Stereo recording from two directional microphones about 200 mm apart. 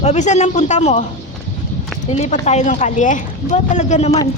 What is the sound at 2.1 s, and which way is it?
A woman's voice, 35° left (ahead or behind).